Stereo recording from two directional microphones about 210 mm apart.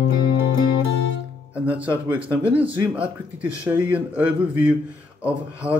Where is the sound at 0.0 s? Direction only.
55° left (ahead or behind).